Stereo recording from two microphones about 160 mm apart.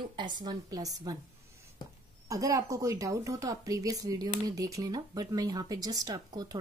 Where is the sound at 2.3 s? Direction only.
20° right (ahead or behind).